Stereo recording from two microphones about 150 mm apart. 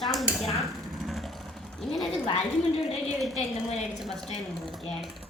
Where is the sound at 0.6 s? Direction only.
Centre (ahead or behind).